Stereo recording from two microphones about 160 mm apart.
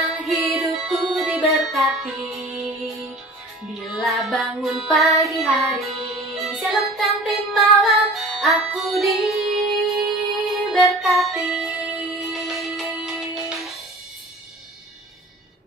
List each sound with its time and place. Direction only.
0.2 s music: centre (ahead or behind)
3.8 s music: centre (ahead or behind)